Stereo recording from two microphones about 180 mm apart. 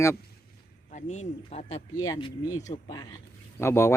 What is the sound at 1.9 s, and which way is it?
Speech, 20° left (ahead or behind).